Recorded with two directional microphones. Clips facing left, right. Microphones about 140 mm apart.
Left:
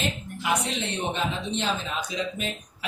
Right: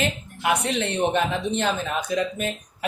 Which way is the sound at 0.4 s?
60° right (ahead or behind).